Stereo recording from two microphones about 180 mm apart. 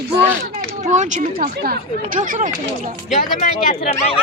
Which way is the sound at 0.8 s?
40° right (ahead or behind).